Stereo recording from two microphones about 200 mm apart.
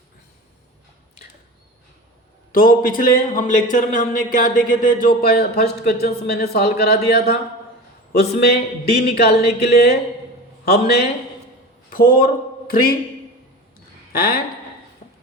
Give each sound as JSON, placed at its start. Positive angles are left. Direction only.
{"t": 2.5, "sound": "a man's voice", "side_deg": 45}
{"t": 14.1, "sound": "a woman's voice", "side_deg": 50}